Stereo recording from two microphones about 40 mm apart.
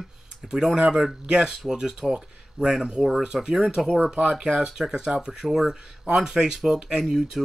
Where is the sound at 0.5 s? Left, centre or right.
Centre.